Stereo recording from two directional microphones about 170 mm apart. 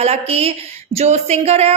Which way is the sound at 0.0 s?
35° right (ahead or behind).